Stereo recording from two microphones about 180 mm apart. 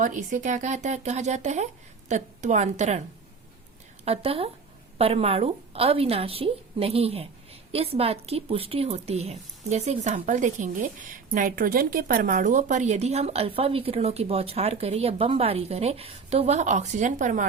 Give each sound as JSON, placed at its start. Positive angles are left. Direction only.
{"t": 0.0, "sound": "a woman's voice", "side_deg": -45}
{"t": 4.0, "sound": "a woman's voice", "side_deg": -35}